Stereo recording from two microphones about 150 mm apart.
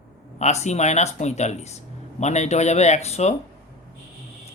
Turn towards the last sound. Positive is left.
turn(degrees=45)  # may be behind; listen again after turning